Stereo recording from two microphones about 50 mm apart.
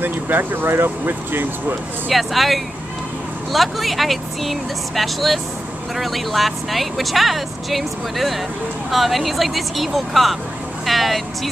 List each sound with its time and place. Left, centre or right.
0.0 s speech: right
2.0 s speech: centre